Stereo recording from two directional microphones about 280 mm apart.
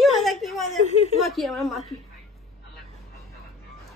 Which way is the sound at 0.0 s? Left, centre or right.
Centre.